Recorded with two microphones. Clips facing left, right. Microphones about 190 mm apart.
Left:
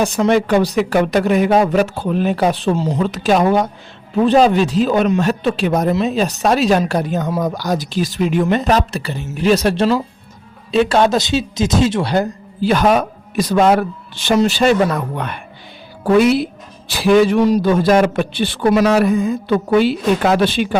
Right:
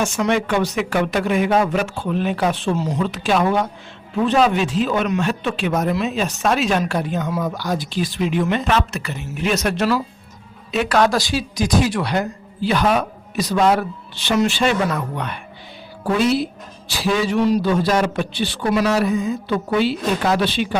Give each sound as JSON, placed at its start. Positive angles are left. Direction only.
{"t": 0.0, "sound": "a man's voice", "side_deg": 35}
{"t": 3.0, "sound": "a man's voice", "side_deg": 40}
{"t": 16.1, "sound": "a man's voice", "side_deg": 60}